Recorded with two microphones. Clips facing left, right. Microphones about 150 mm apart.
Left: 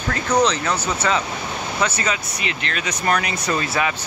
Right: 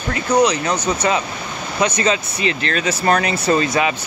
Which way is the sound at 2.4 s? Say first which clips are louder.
Right 7 dB; 35° right (ahead or behind).